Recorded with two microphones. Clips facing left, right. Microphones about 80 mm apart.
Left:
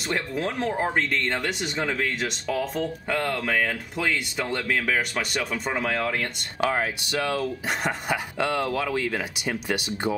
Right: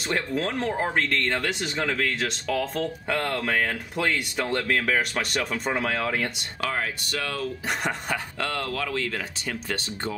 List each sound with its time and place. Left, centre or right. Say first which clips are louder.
0.1 s speech: right 1 dB; centre
6.6 s speech: left 4 dB; left
7.3 s speech: left 2 dB; centre